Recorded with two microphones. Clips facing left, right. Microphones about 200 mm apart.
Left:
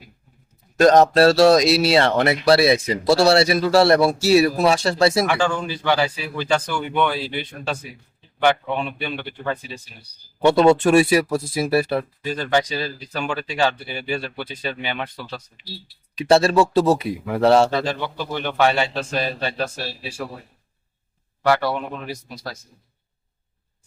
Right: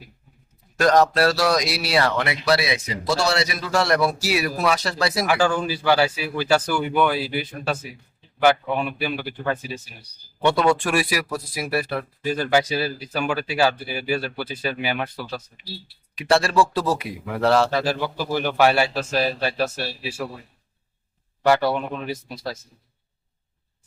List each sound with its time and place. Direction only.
0.8 s a man's voice: 25° left (ahead or behind)
5.3 s speech: 5° right (ahead or behind)
10.4 s a man's voice: 25° left (ahead or behind)
12.2 s speech: 5° right (ahead or behind)
16.1 s a man's voice: 25° left (ahead or behind)
17.7 s speech: 5° right (ahead or behind)